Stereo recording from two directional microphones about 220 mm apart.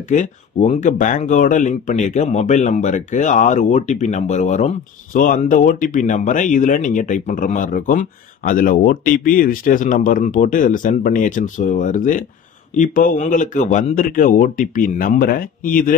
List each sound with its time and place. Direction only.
0.1 s speech: 30° left (ahead or behind)